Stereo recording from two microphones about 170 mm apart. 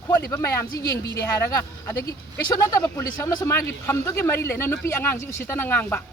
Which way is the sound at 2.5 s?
20° left (ahead or behind).